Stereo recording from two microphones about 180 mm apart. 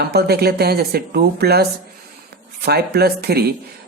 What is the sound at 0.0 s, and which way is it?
Speech, 60° right (ahead or behind).